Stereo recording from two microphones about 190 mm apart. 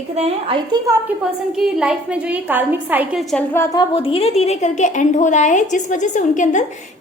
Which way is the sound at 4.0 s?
30° left (ahead or behind).